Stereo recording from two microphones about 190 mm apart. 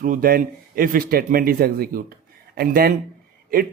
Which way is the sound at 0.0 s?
45° right (ahead or behind).